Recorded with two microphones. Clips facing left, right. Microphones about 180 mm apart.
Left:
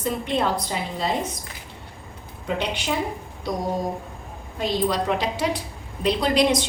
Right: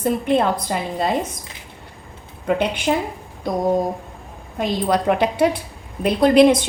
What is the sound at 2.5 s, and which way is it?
Speech, 55° right (ahead or behind).